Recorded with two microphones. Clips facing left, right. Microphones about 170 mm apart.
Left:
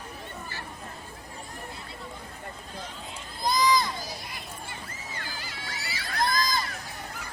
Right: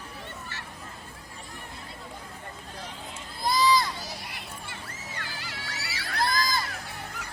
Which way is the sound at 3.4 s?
20° left (ahead or behind).